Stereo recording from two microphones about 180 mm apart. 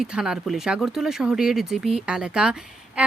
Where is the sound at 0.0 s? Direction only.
5° right (ahead or behind).